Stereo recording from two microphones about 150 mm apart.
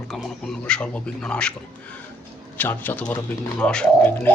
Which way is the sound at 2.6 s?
10° left (ahead or behind).